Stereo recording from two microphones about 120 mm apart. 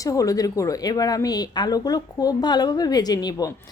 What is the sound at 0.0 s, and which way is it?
Speech, 30° left (ahead or behind).